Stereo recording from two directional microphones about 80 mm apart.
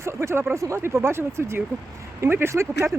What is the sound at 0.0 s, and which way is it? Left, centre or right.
Speech, right.